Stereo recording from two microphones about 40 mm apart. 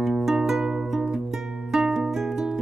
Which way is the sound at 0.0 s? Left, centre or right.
Centre.